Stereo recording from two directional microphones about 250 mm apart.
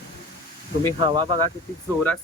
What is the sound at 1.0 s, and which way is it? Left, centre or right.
Speech, centre.